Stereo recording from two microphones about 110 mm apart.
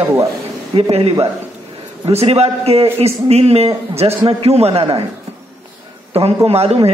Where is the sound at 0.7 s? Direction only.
55° right (ahead or behind).